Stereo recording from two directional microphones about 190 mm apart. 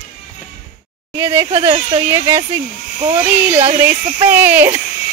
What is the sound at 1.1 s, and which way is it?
Speech, 15° right (ahead or behind).